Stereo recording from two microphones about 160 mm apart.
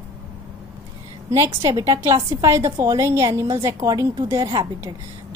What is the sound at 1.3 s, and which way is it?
A woman's voice, 20° right (ahead or behind).